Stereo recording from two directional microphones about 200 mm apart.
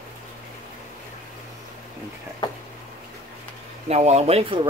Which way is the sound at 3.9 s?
35° right (ahead or behind).